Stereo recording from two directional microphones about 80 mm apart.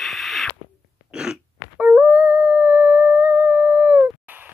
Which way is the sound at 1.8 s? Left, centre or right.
Centre.